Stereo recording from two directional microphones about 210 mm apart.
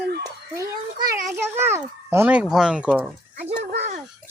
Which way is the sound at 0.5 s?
15° right (ahead or behind).